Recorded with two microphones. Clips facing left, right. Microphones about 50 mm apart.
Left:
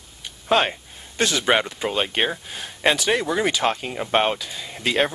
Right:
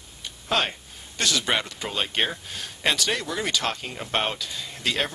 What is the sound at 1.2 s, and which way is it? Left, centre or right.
Speech, left.